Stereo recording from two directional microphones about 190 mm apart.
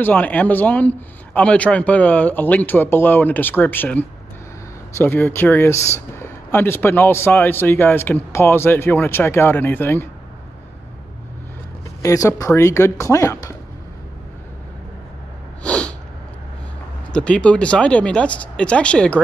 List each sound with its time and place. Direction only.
0.0 s speech: 10° left (ahead or behind)
12.0 s speech: 15° left (ahead or behind)
15.6 s sneeze: 5° left (ahead or behind)
17.1 s speech: 5° left (ahead or behind)